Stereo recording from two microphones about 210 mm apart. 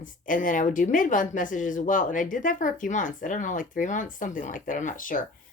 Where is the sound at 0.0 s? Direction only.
40° left (ahead or behind).